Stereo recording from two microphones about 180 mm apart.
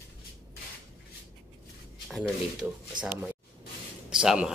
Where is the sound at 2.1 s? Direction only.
Centre (ahead or behind).